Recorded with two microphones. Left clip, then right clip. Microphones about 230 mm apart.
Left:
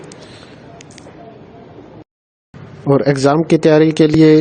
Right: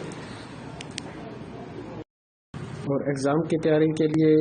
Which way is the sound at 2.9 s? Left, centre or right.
Left.